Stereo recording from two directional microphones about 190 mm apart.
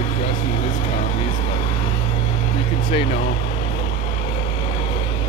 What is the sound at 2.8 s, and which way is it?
Speech, 30° left (ahead or behind).